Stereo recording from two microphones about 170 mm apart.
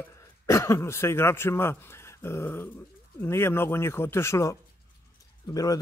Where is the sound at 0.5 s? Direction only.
15° left (ahead or behind).